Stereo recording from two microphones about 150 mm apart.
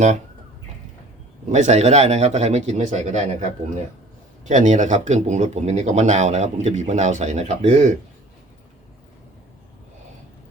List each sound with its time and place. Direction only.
1.5 s speech: 50° right (ahead or behind)